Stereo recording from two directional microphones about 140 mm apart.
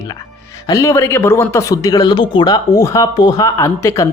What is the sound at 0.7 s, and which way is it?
Speech, 20° left (ahead or behind).